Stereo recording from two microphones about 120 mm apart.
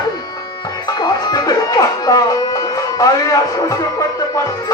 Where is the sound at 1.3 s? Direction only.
30° left (ahead or behind).